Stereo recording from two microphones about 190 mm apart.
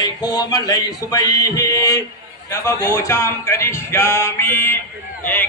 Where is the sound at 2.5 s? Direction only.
15° left (ahead or behind).